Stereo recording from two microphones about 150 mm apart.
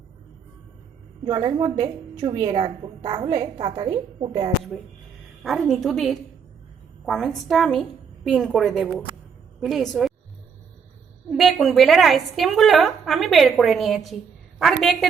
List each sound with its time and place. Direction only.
1.2 s a woman's voice: 30° right (ahead or behind)
5.4 s a woman's voice: centre (ahead or behind)
11.3 s a woman's voice: centre (ahead or behind)